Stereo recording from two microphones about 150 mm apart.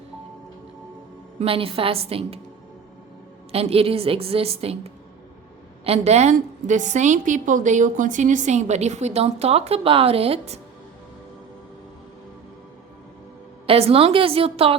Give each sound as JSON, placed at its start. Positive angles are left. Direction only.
{"t": 1.4, "sound": "a woman's voice", "side_deg": -40}
{"t": 3.5, "sound": "a woman's voice", "side_deg": -40}
{"t": 13.7, "sound": "a woman's voice", "side_deg": -40}